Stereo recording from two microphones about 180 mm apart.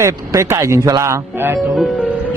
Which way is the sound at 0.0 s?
15° right (ahead or behind).